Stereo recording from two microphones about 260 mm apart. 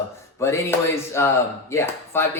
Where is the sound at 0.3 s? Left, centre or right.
Centre.